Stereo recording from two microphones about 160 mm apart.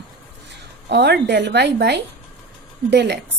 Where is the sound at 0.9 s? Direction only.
90° right.